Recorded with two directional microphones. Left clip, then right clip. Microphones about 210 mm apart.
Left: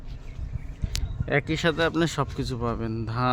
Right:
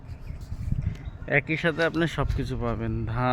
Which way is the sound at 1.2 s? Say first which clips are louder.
Even; 15° left (ahead or behind).